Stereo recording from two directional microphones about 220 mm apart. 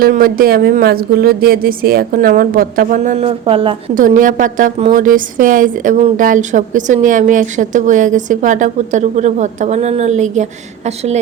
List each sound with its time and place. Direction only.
0.0 s a woman's voice: 40° right (ahead or behind); by 3.8 s 25° right (ahead or behind)
3.9 s a woman's voice: 35° right (ahead or behind)